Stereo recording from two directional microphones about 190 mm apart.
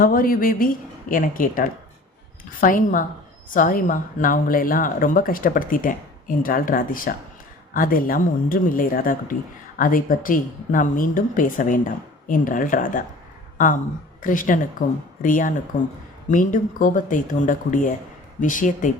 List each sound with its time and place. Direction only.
0.0 s speech: 50° left (ahead or behind)
14.2 s speech: 45° left (ahead or behind)